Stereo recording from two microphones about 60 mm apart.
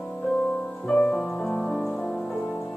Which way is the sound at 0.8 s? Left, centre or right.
Centre.